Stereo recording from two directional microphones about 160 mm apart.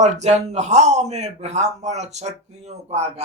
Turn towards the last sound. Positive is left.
turn(degrees=-45)  # may be behind; listen again after turning